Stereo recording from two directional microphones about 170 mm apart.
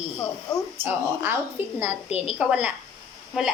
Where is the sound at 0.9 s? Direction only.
10° right (ahead or behind).